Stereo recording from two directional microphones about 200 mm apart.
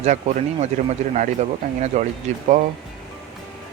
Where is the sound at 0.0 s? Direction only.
35° right (ahead or behind).